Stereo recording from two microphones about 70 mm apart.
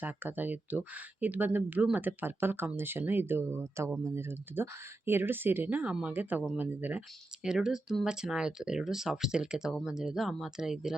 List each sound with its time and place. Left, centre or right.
0.0 s speech: right
6.6 s speech: right
7.4 s speech: centre